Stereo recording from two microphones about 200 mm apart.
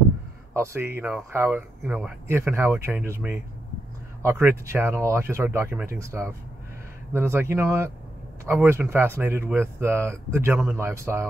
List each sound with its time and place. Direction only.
0.6 s speech: 10° right (ahead or behind)